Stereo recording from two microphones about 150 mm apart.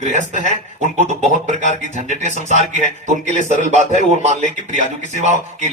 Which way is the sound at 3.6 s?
50° right (ahead or behind).